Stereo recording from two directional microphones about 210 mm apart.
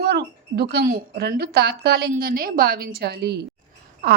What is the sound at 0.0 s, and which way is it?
A woman's voice, 50° right (ahead or behind).